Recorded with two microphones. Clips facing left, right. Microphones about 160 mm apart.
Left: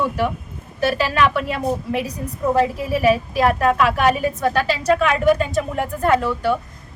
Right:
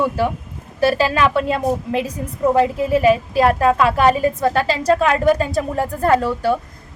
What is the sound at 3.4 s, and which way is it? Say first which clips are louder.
A woman's voice: right 2 dB; 30° right (ahead or behind).